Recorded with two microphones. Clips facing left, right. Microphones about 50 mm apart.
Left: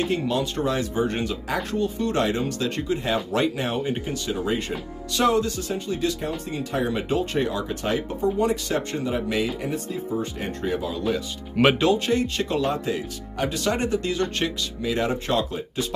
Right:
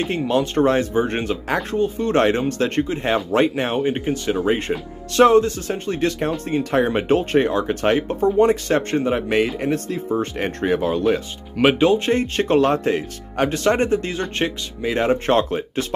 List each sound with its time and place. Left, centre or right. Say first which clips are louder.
0.0 s speech: right 4 dB; right
11.6 s speech: right 2 dB; centre
12.1 s speech: right 5 dB; right